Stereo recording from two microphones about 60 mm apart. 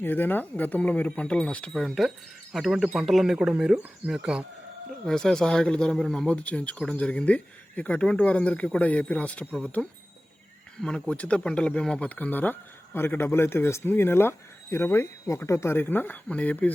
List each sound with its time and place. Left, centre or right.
0.0 s speech: left; by 1.8 s centre
1.8 s speech: centre
3.7 s speech: centre
5.0 s speech: centre